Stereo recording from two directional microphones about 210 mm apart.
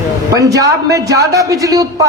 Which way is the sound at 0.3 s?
15° right (ahead or behind).